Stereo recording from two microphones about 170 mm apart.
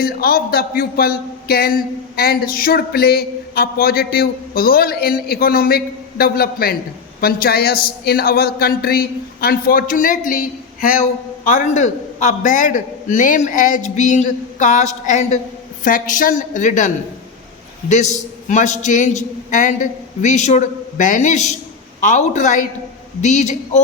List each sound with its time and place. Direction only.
0.0 s a man's voice: 60° left (ahead or behind); by 23.8 s 45° left (ahead or behind)